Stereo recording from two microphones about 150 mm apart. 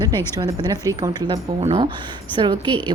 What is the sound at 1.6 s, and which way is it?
A woman's voice, 40° right (ahead or behind).